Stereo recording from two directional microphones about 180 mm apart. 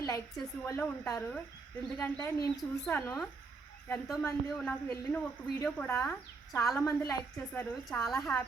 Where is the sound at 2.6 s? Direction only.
5° left (ahead or behind).